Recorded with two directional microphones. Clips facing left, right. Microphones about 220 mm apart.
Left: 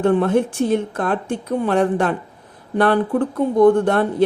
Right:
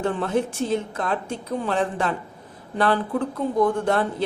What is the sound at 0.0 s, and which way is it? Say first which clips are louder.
A woman's voice: left 7 dB; 55° left (ahead or behind).